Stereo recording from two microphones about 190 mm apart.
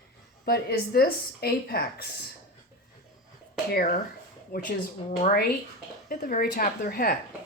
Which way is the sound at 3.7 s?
55° left (ahead or behind).